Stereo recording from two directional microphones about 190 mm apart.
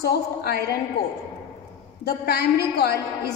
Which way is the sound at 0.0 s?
55° left (ahead or behind).